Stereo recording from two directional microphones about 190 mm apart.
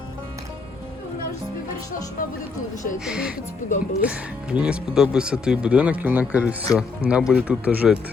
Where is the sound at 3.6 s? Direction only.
45° left (ahead or behind).